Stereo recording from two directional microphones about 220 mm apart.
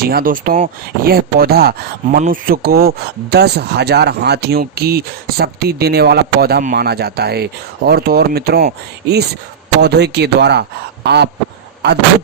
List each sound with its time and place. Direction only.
0.0 s speech: 40° right (ahead or behind)